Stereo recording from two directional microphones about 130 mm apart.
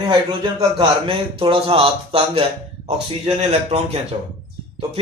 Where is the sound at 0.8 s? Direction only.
45° right (ahead or behind).